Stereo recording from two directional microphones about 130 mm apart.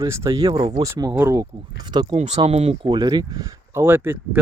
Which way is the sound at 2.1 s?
60° right (ahead or behind).